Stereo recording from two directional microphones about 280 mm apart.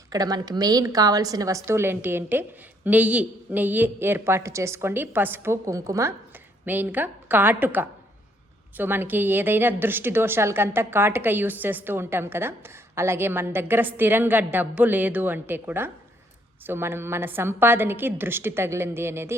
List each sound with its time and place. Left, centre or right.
0.1 s a woman's voice: centre